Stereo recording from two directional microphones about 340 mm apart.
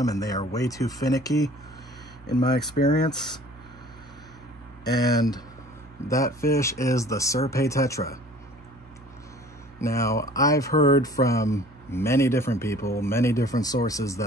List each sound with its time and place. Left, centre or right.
0.0 s speech: centre
2.8 s speech: centre
4.9 s speech: centre
9.8 s speech: centre